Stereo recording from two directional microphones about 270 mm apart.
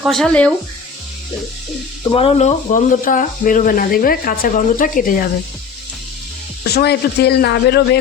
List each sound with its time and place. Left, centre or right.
0.0 s speech: centre
2.0 s speech: left
6.7 s speech: left